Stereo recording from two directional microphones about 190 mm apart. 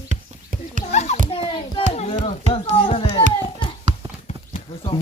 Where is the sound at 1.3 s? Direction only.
25° left (ahead or behind).